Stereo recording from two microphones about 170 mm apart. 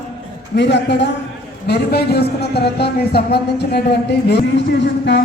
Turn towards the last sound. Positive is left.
turn(degrees=85)